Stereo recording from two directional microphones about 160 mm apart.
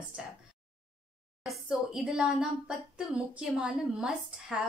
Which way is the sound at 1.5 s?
5° right (ahead or behind).